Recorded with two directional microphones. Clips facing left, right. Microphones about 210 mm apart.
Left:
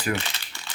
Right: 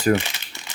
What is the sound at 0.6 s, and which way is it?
Crumpling, 20° right (ahead or behind).